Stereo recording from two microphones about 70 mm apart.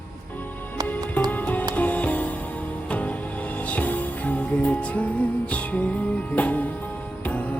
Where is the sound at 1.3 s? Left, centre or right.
Left.